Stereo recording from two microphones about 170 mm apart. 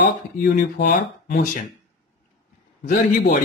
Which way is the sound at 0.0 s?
75° left (ahead or behind).